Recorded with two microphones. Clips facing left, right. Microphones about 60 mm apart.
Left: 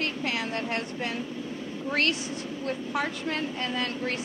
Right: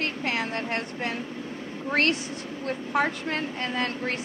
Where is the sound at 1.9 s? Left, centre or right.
Right.